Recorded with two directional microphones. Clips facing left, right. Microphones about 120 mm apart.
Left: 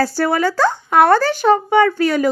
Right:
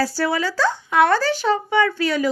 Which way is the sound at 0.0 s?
50° left (ahead or behind).